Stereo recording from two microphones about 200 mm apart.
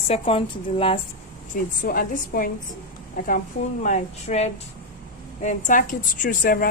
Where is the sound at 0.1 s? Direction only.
30° left (ahead or behind).